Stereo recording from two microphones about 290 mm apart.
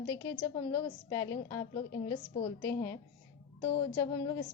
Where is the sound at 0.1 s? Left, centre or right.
Centre.